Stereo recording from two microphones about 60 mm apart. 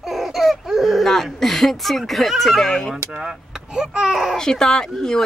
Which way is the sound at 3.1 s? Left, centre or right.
Centre.